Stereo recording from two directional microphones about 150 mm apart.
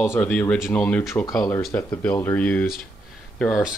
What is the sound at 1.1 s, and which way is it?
Speech, 20° left (ahead or behind).